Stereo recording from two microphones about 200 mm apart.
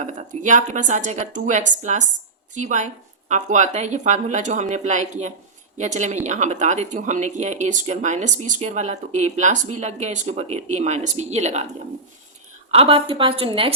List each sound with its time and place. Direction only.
0.0 s speech: 40° right (ahead or behind)
12.7 s a woman's voice: 30° right (ahead or behind)